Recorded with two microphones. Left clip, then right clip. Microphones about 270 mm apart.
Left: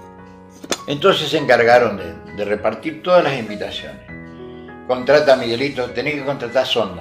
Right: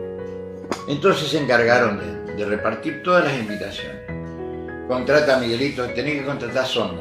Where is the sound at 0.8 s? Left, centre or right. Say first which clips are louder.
Left 3 dB; left.